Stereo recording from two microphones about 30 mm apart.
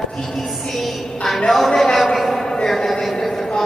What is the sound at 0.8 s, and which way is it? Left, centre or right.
Music, centre.